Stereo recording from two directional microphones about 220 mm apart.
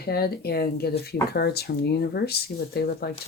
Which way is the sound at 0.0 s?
45° left (ahead or behind).